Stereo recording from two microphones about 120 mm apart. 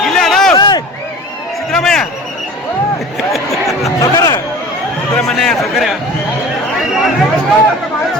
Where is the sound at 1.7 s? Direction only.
5° left (ahead or behind).